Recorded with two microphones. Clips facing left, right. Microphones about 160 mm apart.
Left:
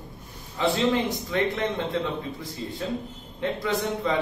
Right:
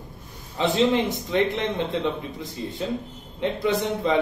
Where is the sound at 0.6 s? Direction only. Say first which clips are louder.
Right 2 dB; 20° right (ahead or behind).